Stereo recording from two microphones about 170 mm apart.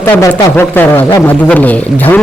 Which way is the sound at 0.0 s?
15° left (ahead or behind).